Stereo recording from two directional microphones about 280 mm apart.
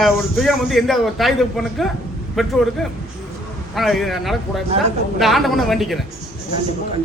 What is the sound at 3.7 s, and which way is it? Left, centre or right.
A man's voice, centre.